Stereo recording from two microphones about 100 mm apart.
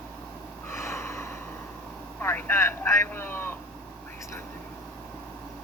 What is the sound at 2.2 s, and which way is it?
Speech, 25° left (ahead or behind).